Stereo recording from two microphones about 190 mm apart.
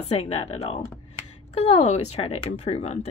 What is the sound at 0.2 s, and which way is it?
Speech, 30° left (ahead or behind).